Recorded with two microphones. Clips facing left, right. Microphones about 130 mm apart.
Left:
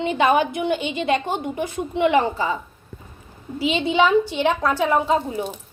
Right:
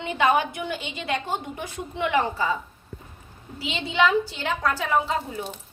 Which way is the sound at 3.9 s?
20° left (ahead or behind).